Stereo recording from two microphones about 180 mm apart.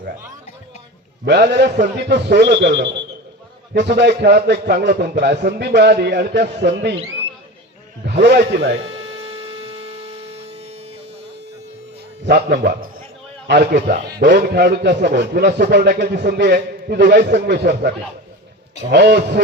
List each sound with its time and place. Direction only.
1.2 s a man's voice: 65° right (ahead or behind)
8.0 s a man's voice: 70° right (ahead or behind)
8.8 s hum: 35° right (ahead or behind)
12.2 s a man's voice: 65° right (ahead or behind)